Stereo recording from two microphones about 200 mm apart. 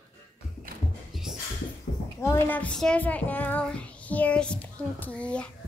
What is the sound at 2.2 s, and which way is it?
A child's voice, 10° left (ahead or behind).